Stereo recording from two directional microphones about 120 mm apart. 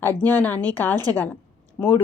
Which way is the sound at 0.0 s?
15° left (ahead or behind).